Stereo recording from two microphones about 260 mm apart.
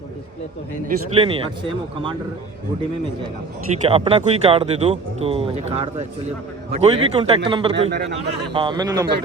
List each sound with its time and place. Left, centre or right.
0.9 s speech: right
3.8 s speech: right
7.8 s a man's voice: right
8.5 s a man's voice: centre